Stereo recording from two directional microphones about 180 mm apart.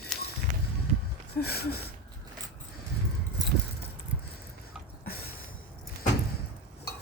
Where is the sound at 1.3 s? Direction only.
60° left (ahead or behind).